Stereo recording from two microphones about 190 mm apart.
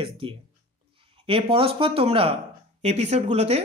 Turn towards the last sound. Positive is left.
turn(degrees=-35)  # may be behind; listen again after turning